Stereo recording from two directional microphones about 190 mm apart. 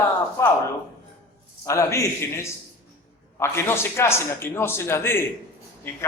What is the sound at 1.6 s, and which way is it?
A man's voice, 15° left (ahead or behind).